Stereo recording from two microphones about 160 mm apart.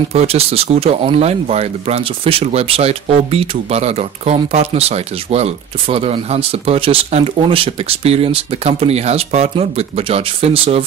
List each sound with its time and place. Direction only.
0.1 s speech: 40° right (ahead or behind)